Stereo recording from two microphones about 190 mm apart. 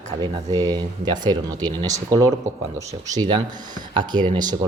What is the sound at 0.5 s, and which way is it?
Speech, 20° right (ahead or behind).